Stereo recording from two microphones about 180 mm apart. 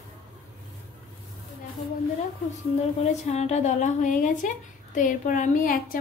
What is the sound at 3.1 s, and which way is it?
A woman's voice, 40° left (ahead or behind).